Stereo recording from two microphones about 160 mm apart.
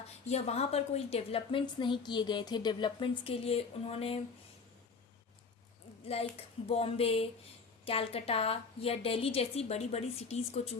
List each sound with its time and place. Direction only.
0.3 s a woman's voice: 40° left (ahead or behind)
6.1 s a woman's voice: 40° left (ahead or behind)